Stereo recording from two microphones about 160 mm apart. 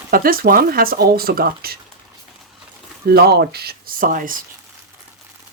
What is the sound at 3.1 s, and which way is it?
Speech, 80° right.